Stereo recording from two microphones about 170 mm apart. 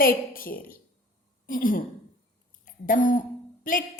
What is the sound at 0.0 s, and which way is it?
A woman's voice, 60° left (ahead or behind).